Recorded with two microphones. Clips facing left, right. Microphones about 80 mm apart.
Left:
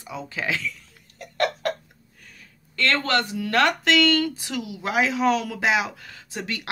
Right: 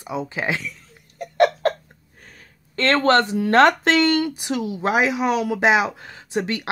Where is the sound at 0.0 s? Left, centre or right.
Right.